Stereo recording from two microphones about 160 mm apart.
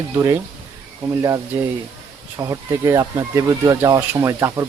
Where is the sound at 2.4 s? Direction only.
20° right (ahead or behind).